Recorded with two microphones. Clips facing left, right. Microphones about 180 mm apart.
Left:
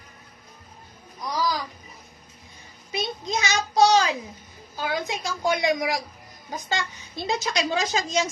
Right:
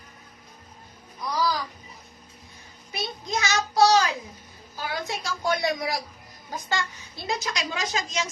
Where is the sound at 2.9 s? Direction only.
20° left (ahead or behind).